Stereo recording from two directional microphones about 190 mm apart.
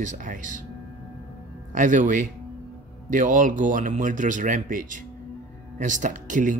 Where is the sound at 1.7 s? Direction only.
45° right (ahead or behind).